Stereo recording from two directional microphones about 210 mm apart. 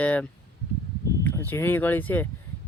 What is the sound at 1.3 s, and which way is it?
Speech, 10° left (ahead or behind).